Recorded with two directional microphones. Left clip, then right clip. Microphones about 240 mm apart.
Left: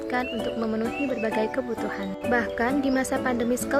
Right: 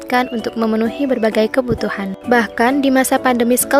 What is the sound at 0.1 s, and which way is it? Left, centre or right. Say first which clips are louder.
A woman's voice: right 11 dB; right.